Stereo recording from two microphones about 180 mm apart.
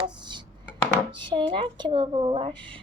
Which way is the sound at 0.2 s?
25° right (ahead or behind).